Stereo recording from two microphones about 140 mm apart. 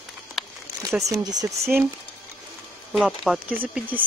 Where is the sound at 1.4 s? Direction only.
15° right (ahead or behind).